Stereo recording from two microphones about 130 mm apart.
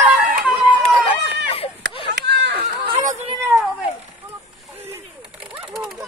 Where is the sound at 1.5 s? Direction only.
45° left (ahead or behind).